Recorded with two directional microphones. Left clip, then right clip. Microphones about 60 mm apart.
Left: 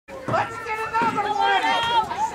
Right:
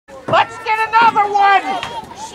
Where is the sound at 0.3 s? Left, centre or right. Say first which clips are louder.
Right 10 dB; left.